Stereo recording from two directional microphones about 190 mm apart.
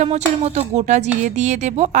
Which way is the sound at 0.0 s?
35° right (ahead or behind).